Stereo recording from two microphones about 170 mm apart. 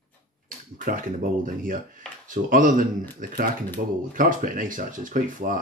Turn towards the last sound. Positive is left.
turn(degrees=-55)  # may be behind; listen again after turning